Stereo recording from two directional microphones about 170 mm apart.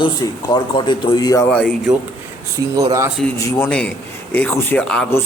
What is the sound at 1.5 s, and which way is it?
Speech, 5° left (ahead or behind).